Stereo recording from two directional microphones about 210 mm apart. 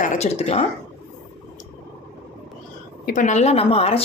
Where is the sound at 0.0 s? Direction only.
35° left (ahead or behind).